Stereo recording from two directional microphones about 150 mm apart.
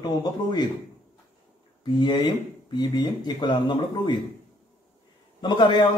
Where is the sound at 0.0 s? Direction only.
30° left (ahead or behind).